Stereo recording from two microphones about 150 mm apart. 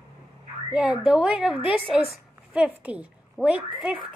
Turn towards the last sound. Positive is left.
turn(degrees=-5)  # may be behind; listen again after turning